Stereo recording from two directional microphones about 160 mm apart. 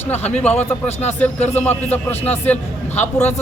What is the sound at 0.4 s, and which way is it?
Speech, 10° left (ahead or behind).